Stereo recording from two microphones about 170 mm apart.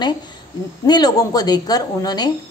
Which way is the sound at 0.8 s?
25° left (ahead or behind).